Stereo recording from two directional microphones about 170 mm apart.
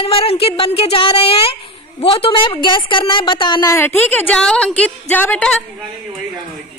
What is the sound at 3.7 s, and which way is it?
A woman's voice, 10° left (ahead or behind).